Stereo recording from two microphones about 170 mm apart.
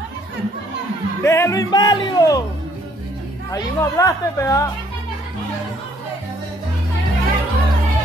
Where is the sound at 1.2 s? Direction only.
15° left (ahead or behind).